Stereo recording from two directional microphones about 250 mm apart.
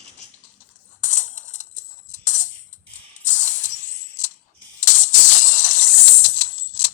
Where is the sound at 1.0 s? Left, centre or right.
Left.